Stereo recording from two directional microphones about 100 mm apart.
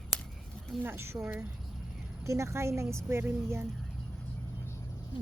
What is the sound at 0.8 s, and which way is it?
A woman's voice, 25° right (ahead or behind).